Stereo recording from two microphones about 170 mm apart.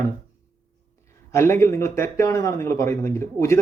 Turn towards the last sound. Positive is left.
turn(degrees=15)  # may be behind; listen again after turning